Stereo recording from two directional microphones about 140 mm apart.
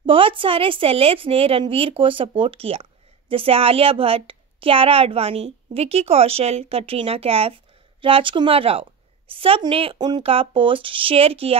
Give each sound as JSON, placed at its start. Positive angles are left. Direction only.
{"t": 0.0, "sound": "speech", "side_deg": -40}